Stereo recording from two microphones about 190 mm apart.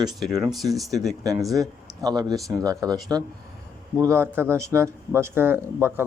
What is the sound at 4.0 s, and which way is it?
A man's voice, 15° right (ahead or behind).